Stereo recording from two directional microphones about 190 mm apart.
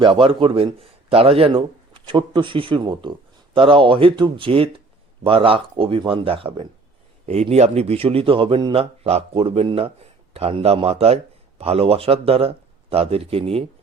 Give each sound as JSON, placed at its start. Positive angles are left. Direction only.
{"t": 0.0, "sound": "a man's voice", "side_deg": -25}